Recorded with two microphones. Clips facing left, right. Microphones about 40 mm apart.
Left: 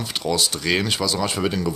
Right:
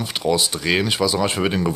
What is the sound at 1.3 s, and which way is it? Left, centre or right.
Speech, right.